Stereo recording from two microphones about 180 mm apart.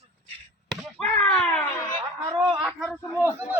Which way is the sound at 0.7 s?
5° left (ahead or behind).